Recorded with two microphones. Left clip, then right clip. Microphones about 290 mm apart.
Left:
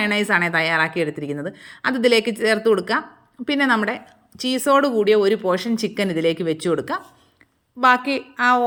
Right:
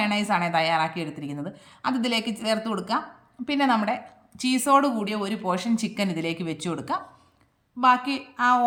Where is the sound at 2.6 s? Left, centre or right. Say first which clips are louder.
Left 12 dB; right.